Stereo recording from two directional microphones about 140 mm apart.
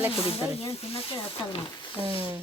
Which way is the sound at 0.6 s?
45° left (ahead or behind).